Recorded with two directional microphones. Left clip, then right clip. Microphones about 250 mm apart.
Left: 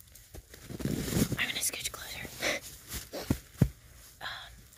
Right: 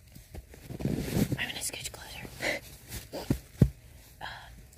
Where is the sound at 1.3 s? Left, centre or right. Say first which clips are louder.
Left 2 dB; centre.